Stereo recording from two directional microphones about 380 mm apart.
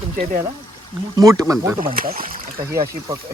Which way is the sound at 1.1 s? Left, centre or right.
Centre.